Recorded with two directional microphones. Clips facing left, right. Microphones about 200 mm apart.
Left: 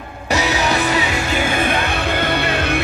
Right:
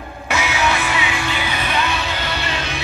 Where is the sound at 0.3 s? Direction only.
35° left (ahead or behind).